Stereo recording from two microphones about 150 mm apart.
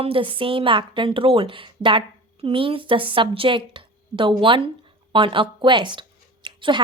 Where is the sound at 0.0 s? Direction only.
35° right (ahead or behind).